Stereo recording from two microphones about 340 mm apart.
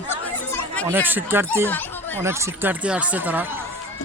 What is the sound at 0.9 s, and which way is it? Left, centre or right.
Speech, centre.